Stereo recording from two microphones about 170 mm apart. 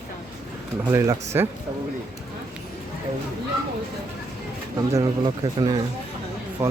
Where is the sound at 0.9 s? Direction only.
15° right (ahead or behind).